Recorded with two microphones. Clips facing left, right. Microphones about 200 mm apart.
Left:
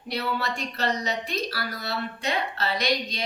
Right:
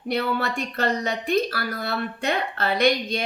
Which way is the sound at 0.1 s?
50° right (ahead or behind).